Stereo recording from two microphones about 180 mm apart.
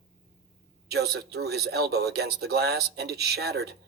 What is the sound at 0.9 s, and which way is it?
A man's voice, 60° right (ahead or behind).